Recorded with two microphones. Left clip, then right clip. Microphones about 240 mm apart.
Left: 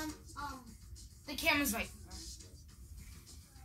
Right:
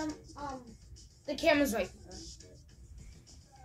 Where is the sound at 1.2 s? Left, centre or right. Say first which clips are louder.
Right 5 dB; left.